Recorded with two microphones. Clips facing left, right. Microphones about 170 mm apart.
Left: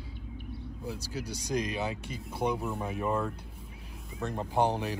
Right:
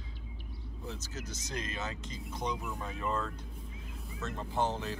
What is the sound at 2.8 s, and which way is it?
Speech, 15° left (ahead or behind).